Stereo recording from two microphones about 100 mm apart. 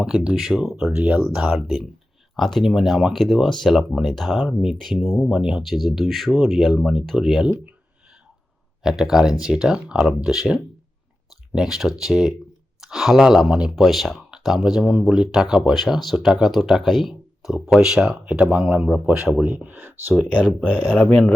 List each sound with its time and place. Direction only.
0.0 s speech: 5° right (ahead or behind)
8.8 s speech: 5° right (ahead or behind); by 20.1 s 20° right (ahead or behind)
20.7 s speech: 5° left (ahead or behind)